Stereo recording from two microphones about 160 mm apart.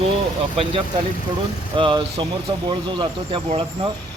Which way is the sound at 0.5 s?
35° right (ahead or behind).